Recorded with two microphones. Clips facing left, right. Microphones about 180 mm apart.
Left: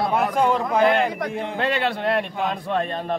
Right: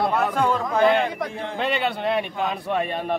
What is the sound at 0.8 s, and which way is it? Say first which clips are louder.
A man's voice: even; centre (ahead or behind).